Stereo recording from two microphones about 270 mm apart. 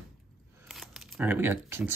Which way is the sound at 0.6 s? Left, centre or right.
Centre.